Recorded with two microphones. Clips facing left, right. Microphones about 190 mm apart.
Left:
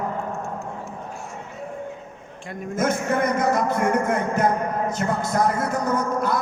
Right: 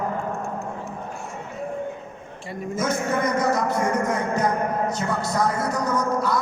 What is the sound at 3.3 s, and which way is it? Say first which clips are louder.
Speech: left 1 dB; 55° left (ahead or behind).